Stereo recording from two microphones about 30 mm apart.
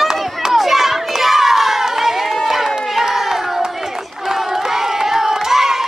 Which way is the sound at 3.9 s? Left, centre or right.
Centre.